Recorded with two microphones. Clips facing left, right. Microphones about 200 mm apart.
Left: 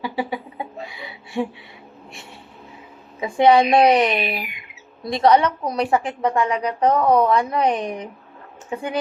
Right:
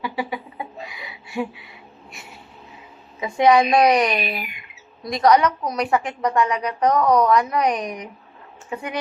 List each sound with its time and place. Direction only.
0.0 s speech: 30° left (ahead or behind)
0.9 s a sound: 30° left (ahead or behind)
3.2 s speech: 30° left (ahead or behind)